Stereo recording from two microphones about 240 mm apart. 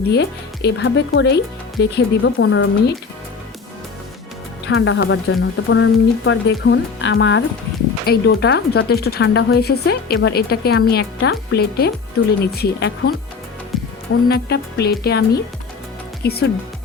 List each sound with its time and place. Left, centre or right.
0.1 s speech: left
4.6 s speech: left
13.7 s music: centre
14.3 s speech: left